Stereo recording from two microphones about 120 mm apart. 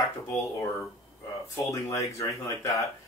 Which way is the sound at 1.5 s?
25° left (ahead or behind).